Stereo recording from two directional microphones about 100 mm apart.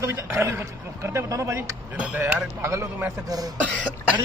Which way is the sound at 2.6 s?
30° right (ahead or behind).